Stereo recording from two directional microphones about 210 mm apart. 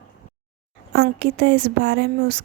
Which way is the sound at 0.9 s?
50° right (ahead or behind).